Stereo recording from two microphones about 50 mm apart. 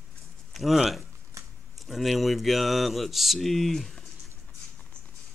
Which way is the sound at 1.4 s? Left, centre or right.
Right.